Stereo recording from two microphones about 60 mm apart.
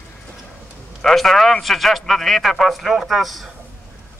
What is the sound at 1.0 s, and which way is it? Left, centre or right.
A man's voice, centre.